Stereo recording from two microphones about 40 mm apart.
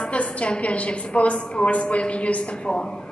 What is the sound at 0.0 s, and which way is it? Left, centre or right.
A woman's voice, left.